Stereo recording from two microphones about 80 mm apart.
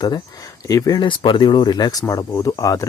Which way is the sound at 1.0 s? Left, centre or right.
Left.